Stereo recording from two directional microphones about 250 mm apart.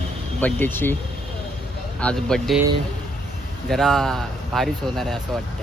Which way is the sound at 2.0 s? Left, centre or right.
Centre.